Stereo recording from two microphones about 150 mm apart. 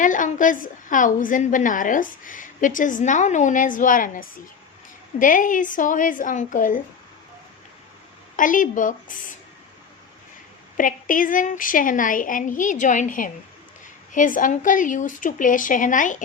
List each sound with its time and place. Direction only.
0.0 s a woman's voice: 60° left (ahead or behind)
8.4 s a woman's voice: 60° left (ahead or behind)
10.8 s a woman's voice: 65° left (ahead or behind)